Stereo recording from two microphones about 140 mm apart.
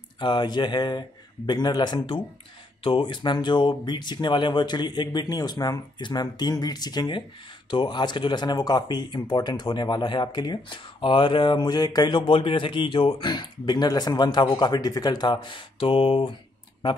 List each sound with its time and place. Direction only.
0.2 s speech: 35° left (ahead or behind)